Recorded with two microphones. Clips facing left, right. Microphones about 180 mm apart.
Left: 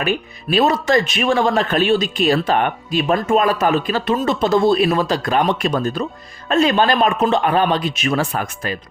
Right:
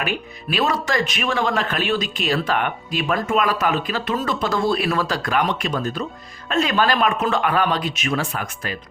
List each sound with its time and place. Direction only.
0.5 s speech: 25° left (ahead or behind)